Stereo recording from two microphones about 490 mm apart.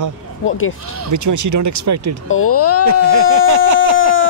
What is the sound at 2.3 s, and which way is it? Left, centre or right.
Speech, left.